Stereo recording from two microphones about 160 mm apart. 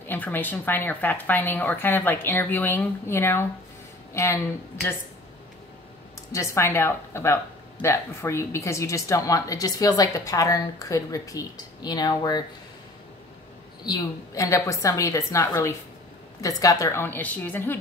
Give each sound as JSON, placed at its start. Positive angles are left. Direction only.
{"t": 0.1, "sound": "speech", "side_deg": 10}
{"t": 6.3, "sound": "speech", "side_deg": 20}
{"t": 13.8, "sound": "speech", "side_deg": 20}